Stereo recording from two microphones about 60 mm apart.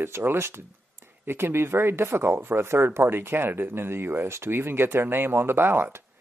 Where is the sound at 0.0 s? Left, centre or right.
Right.